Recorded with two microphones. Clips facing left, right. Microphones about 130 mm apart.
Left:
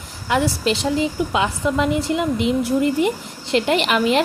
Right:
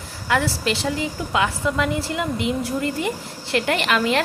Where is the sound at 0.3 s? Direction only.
20° left (ahead or behind).